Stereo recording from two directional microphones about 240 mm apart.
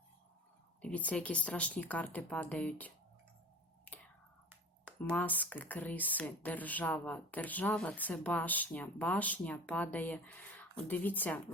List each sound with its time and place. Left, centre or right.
0.8 s speech: centre
5.1 s speech: centre